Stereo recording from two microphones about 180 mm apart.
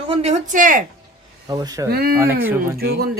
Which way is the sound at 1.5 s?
20° right (ahead or behind).